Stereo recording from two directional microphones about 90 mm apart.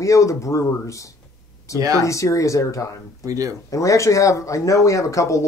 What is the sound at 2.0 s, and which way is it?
Speech, 35° left (ahead or behind).